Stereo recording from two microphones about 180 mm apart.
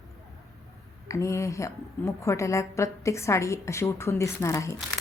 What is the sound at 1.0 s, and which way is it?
A woman's voice, 15° left (ahead or behind).